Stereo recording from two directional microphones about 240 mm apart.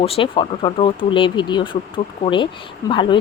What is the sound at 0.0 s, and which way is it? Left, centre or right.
Speech, left.